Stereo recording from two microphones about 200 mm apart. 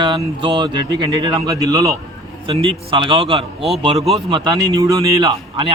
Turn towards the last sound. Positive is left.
turn(degrees=-20)  # may be behind; listen again after turning